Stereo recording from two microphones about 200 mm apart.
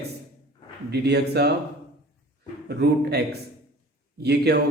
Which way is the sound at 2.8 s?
55° right (ahead or behind).